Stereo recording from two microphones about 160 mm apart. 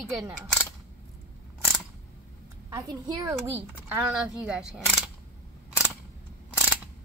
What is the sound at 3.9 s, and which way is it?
Speech, 10° right (ahead or behind).